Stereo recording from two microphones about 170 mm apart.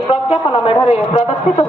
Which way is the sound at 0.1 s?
35° left (ahead or behind).